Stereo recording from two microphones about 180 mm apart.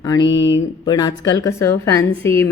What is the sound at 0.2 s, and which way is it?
Speech, 90° left.